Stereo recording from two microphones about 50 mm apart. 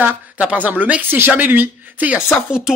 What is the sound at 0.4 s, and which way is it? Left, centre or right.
Speech, right.